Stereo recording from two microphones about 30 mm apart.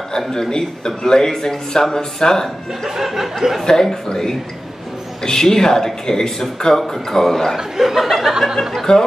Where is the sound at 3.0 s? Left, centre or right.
Centre.